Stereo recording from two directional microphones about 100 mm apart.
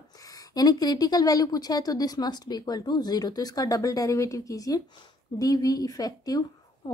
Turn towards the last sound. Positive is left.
turn(degrees=40)  # may be behind; listen again after turning